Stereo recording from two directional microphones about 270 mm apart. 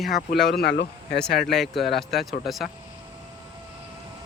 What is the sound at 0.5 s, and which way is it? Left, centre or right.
Speech, left.